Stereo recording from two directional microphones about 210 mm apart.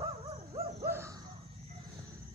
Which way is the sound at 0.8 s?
10° right (ahead or behind).